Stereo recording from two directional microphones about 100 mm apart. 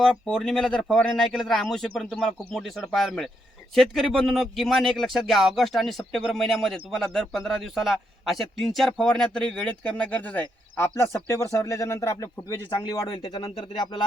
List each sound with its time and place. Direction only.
0.0 s speech: 5° left (ahead or behind)
10.8 s speech: 25° left (ahead or behind); by 13.5 s 45° left (ahead or behind)